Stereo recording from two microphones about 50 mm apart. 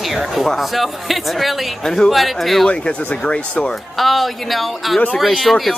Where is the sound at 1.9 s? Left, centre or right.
Centre.